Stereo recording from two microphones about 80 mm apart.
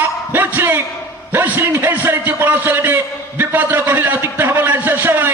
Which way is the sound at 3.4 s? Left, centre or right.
Right.